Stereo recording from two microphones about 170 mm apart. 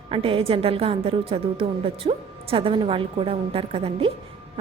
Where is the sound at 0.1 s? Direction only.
35° right (ahead or behind).